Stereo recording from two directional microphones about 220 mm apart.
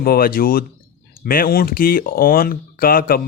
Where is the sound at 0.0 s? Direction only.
45° left (ahead or behind).